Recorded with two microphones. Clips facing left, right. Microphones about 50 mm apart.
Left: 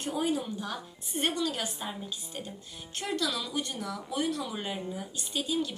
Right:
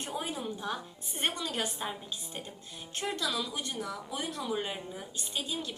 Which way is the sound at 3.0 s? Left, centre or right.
Centre.